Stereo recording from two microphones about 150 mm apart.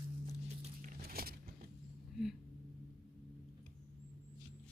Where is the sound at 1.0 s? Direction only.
85° right.